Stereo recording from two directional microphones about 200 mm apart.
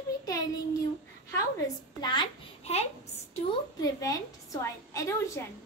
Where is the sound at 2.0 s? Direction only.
20° left (ahead or behind).